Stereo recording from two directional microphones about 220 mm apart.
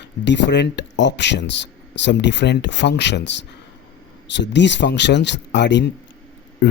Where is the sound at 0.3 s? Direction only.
55° left (ahead or behind).